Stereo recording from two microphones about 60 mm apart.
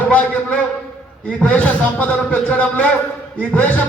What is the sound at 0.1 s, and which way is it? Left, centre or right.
A man's voice, left.